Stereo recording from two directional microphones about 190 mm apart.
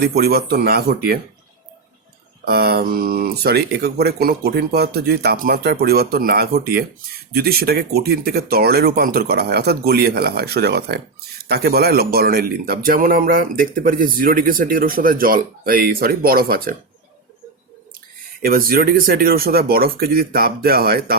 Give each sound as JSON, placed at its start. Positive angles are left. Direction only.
{"t": 0.0, "sound": "speech", "side_deg": -55}
{"t": 2.4, "sound": "speech", "side_deg": -55}
{"t": 18.4, "sound": "speech", "side_deg": -50}